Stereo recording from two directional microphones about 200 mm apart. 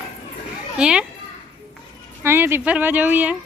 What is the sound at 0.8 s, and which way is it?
Speech, 5° right (ahead or behind).